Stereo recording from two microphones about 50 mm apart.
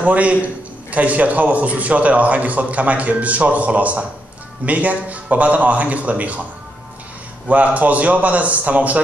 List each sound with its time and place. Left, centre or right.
0.0 s a man's voice: right
7.4 s speech: right